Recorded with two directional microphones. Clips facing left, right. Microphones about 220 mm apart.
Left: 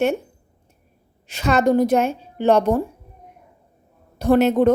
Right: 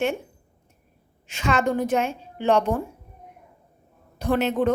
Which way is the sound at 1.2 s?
35° left (ahead or behind).